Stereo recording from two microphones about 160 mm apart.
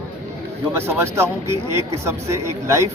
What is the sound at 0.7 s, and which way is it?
Speech, 15° right (ahead or behind).